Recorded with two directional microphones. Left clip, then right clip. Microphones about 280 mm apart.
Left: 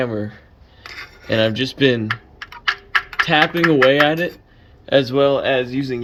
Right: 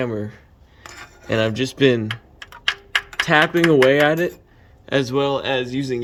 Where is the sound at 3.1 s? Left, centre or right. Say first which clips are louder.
Even; centre.